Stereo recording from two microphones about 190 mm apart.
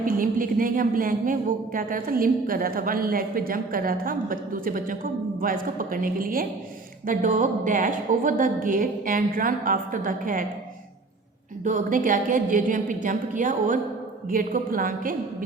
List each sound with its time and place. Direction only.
0.0 s a woman's voice: 45° right (ahead or behind)
11.6 s a woman's voice: 45° right (ahead or behind)